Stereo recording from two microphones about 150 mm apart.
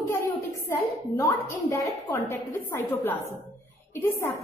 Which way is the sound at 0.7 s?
20° left (ahead or behind).